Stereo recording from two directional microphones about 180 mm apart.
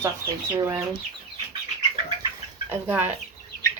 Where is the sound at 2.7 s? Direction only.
10° right (ahead or behind).